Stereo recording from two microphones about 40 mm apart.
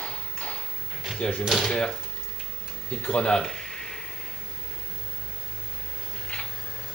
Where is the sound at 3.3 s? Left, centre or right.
Centre.